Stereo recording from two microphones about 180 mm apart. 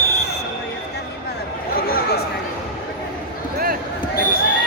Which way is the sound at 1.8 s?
55° left (ahead or behind).